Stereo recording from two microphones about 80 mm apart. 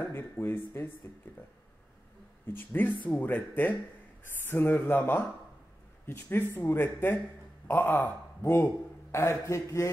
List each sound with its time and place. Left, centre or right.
0.0 s speech: left
2.4 s a man's voice: left